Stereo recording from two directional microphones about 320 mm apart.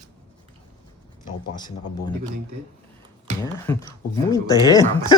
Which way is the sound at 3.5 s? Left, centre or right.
Centre.